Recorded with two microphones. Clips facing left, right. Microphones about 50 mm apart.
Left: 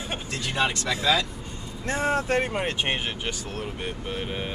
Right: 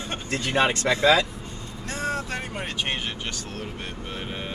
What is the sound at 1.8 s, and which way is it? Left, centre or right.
Speech, left.